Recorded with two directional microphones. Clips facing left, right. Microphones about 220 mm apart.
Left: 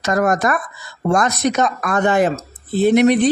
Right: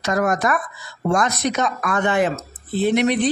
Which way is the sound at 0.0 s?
45° left (ahead or behind).